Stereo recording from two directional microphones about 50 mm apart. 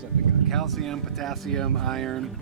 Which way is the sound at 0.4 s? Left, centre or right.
Centre.